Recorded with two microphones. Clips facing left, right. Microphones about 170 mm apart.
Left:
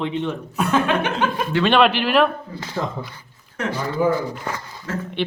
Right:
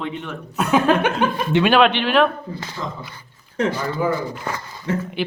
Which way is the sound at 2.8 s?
65° left (ahead or behind).